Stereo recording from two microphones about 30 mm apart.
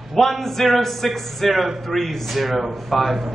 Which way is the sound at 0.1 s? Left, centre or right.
Centre.